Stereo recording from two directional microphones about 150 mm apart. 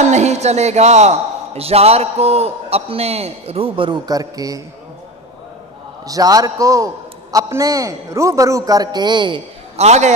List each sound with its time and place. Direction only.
0.0 s a man's voice: 50° right (ahead or behind); by 4.6 s 25° right (ahead or behind)
6.0 s a man's voice: 25° right (ahead or behind)
9.8 s a man's voice: 50° right (ahead or behind)